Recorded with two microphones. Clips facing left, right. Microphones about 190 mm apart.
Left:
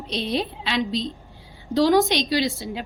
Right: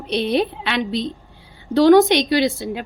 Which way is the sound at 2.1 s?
60° right (ahead or behind).